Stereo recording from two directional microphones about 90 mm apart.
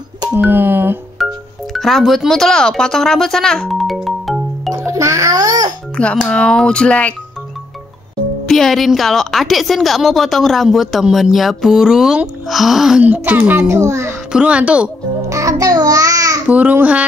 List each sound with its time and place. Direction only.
0.3 s a sound: 20° right (ahead or behind)
1.1 s music: centre (ahead or behind)
4.8 s a child's voice: 35° right (ahead or behind)
5.9 s speech: 15° left (ahead or behind)
8.5 s a woman's voice: centre (ahead or behind)
13.0 s a child's voice: 20° right (ahead or behind)
14.3 s speech: 10° right (ahead or behind)
15.2 s music: 35° right (ahead or behind)
16.4 s speech: 15° right (ahead or behind)